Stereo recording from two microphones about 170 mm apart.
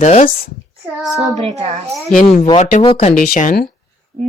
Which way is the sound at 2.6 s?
50° left (ahead or behind).